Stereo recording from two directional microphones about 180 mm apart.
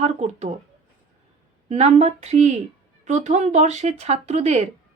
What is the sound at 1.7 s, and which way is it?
Speech, 35° right (ahead or behind).